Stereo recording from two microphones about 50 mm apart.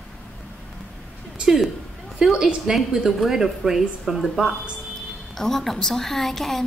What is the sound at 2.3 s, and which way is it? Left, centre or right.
Speech, centre.